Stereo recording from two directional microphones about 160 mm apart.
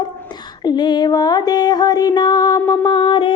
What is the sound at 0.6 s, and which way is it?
Music, 25° left (ahead or behind).